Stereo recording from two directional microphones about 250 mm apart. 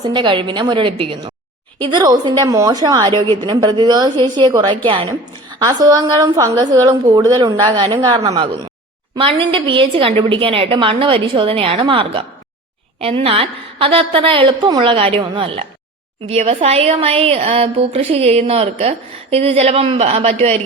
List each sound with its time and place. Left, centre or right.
0.0 s a woman's voice: centre